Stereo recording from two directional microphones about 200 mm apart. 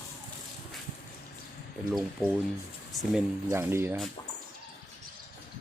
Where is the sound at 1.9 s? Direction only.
Centre (ahead or behind).